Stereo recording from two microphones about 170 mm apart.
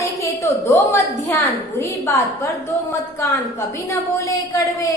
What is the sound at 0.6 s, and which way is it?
A woman's voice, 15° left (ahead or behind).